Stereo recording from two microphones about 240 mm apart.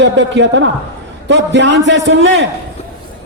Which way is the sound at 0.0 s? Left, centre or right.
Right.